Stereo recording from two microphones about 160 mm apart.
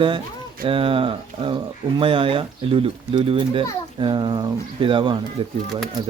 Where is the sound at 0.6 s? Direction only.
35° right (ahead or behind).